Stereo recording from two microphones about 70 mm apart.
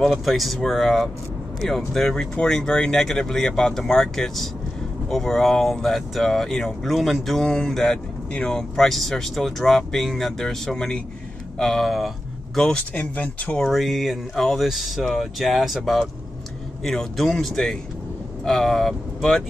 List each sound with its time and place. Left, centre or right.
0.0 s speech: centre
7.4 s speech: centre
12.5 s speech: centre
13.7 s speech: centre